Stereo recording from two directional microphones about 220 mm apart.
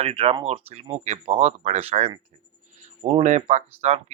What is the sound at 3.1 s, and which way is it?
Speech, 30° right (ahead or behind).